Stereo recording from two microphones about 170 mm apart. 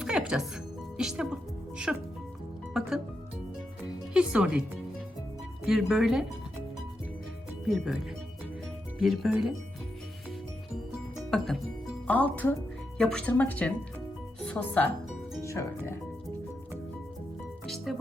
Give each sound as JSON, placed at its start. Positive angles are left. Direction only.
{"t": 0.0, "sound": "music", "side_deg": -5}
{"t": 0.9, "sound": "speech", "side_deg": -5}
{"t": 4.1, "sound": "speech", "side_deg": -5}
{"t": 5.6, "sound": "speech", "side_deg": 0}
{"t": 7.6, "sound": "speech", "side_deg": 0}
{"t": 9.0, "sound": "speech", "side_deg": 0}
{"t": 11.3, "sound": "speech", "side_deg": 5}